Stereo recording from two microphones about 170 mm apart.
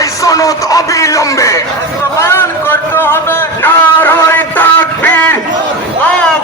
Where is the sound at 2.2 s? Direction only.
15° left (ahead or behind).